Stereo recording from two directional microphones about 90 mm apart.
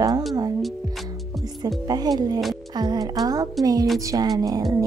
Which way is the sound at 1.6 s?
50° right (ahead or behind).